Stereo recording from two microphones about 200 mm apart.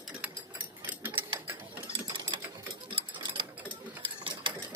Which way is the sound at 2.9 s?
25° right (ahead or behind).